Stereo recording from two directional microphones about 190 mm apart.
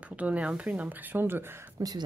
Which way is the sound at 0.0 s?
5° right (ahead or behind).